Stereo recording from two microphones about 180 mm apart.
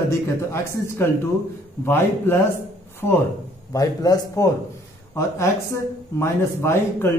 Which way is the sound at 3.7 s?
20° left (ahead or behind).